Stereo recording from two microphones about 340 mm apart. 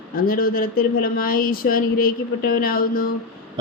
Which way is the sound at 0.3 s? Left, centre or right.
Left.